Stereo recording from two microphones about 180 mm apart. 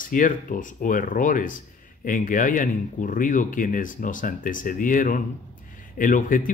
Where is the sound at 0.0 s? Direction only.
50° left (ahead or behind).